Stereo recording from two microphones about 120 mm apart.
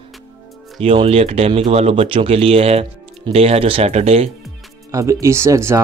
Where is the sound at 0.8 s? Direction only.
55° right (ahead or behind).